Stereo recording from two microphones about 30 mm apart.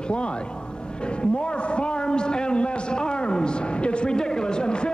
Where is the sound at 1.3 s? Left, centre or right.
Left.